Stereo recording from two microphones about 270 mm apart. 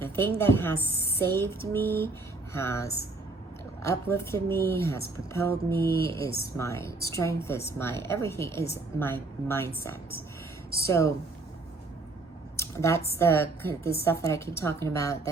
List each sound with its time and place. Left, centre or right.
0.0 s a woman's voice: centre
5.7 s speech: left
6.6 s a woman's voice: centre
12.5 s a sound: centre
13.1 s a woman's voice: centre